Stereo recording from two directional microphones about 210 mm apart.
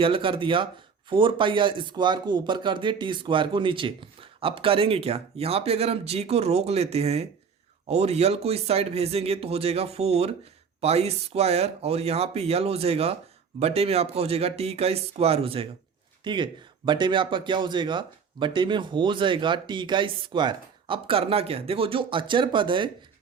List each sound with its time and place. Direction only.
0.0 s speech: 25° right (ahead or behind)